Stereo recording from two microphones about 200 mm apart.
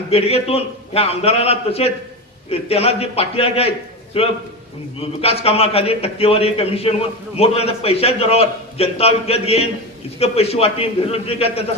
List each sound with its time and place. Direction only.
0.1 s a man's voice: 30° left (ahead or behind)